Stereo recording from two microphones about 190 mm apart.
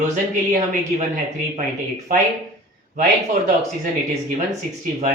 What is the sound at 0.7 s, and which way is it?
Speech, 40° right (ahead or behind).